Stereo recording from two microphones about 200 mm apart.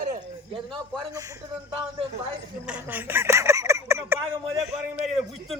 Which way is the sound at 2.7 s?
10° right (ahead or behind).